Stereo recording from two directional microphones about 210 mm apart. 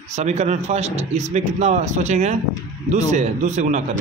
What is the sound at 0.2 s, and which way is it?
A man's voice, 30° right (ahead or behind).